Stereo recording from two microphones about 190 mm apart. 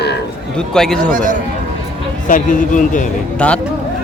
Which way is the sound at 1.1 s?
45° right (ahead or behind).